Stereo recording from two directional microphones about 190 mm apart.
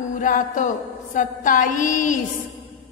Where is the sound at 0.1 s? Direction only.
45° left (ahead or behind).